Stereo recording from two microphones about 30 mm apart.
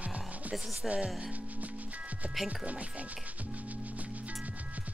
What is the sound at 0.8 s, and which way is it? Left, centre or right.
Speech, right.